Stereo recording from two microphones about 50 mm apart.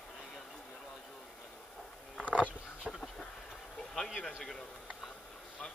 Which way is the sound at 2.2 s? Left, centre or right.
Right.